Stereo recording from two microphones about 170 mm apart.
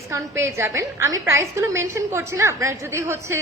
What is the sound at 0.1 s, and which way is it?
A woman's voice, 15° right (ahead or behind).